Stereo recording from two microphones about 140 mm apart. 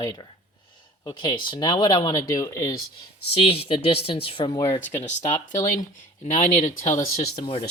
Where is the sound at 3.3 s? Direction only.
40° left (ahead or behind).